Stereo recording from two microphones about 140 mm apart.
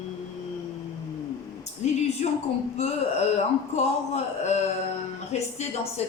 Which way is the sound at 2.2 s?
55° left (ahead or behind).